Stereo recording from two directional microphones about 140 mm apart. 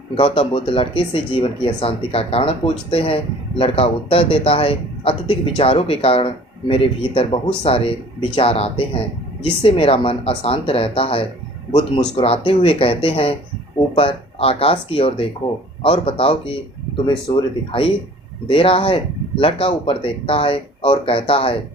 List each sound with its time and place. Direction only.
0.1 s a man's voice: 40° left (ahead or behind)